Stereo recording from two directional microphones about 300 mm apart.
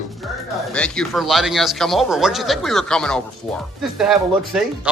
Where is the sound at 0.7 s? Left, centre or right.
Centre.